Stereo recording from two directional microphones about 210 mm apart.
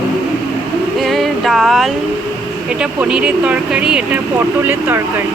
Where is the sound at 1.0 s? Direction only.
Centre (ahead or behind).